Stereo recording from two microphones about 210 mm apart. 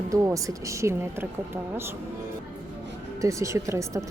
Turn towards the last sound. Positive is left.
turn(degrees=-15)  # may be behind; listen again after turning